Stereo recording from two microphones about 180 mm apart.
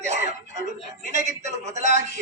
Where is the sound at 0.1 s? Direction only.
40° right (ahead or behind).